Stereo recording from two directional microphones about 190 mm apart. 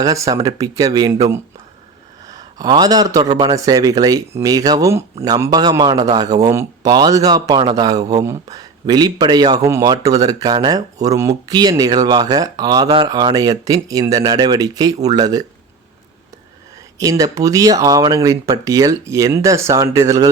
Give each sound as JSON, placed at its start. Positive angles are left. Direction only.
{"t": 0.0, "sound": "speech", "side_deg": -20}
{"t": 17.0, "sound": "speech", "side_deg": -20}